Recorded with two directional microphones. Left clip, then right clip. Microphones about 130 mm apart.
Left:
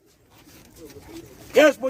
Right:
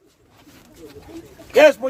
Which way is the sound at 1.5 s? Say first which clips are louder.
Right 4 dB; 30° right (ahead or behind).